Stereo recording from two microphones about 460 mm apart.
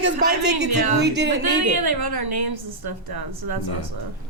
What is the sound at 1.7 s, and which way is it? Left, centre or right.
A woman's voice, right.